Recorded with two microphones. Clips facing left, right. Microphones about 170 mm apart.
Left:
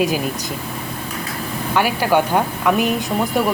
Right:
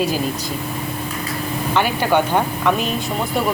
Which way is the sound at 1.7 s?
5° left (ahead or behind).